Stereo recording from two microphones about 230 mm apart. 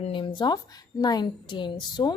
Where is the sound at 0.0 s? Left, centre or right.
Left.